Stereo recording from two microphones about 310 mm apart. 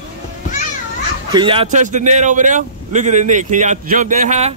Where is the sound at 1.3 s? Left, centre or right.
Centre.